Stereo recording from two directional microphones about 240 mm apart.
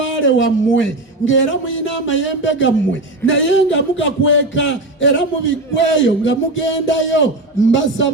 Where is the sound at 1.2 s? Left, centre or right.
Left.